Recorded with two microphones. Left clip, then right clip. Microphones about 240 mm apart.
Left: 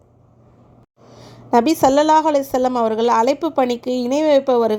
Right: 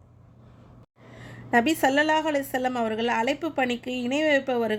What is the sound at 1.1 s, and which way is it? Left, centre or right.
A woman's voice, left.